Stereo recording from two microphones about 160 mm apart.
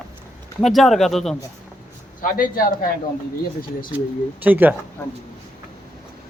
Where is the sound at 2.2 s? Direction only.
60° left (ahead or behind).